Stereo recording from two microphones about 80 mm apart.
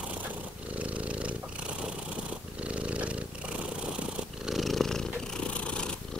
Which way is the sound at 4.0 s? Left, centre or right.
Centre.